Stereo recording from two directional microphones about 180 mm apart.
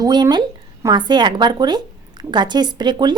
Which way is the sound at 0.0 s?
25° right (ahead or behind).